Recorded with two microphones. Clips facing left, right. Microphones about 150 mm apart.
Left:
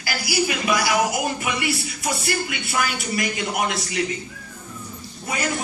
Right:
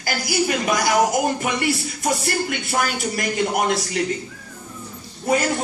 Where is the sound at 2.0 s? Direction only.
45° right (ahead or behind).